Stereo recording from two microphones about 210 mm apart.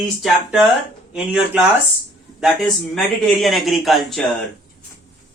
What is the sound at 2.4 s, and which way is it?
Speech, centre (ahead or behind).